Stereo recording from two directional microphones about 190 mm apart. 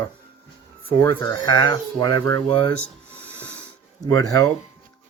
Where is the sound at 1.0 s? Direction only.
15° left (ahead or behind).